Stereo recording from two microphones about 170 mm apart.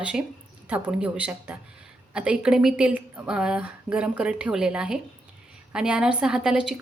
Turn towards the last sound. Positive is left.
turn(degrees=-5)  # may be behind; listen again after turning